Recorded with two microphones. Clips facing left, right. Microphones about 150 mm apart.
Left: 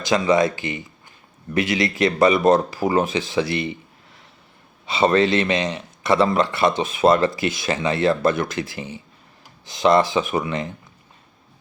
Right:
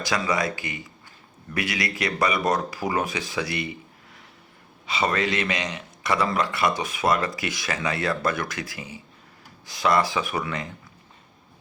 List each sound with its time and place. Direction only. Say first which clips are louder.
0.0 s a man's voice: left 7 dB; 25° left (ahead or behind)
4.9 s a man's voice: left 7 dB; 25° left (ahead or behind)